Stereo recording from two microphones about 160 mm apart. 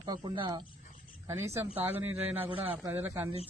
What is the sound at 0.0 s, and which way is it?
Speech, 30° right (ahead or behind).